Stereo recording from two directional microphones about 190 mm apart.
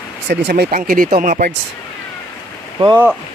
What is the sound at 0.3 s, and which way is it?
Speech, 60° right (ahead or behind).